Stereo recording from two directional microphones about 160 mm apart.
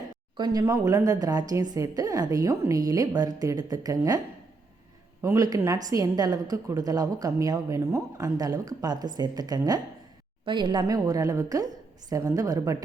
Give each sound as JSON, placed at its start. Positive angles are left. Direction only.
{"t": 0.3, "sound": "a woman's voice", "side_deg": -25}
{"t": 5.2, "sound": "a woman's voice", "side_deg": -20}